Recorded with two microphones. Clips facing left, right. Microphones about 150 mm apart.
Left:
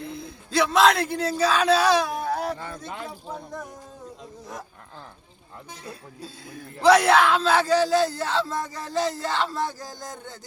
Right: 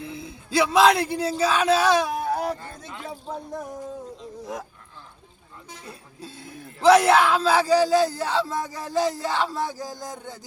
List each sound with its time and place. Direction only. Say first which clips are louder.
0.2 s speech: right 1 dB; 5° right (ahead or behind)
2.3 s a sound: right 1 dB; 15° right (ahead or behind)
2.6 s speech: left 4 dB; 75° left (ahead or behind)
3.1 s speech: right 3 dB; 25° right (ahead or behind)
6.2 s speech: right 1 dB; centre (ahead or behind)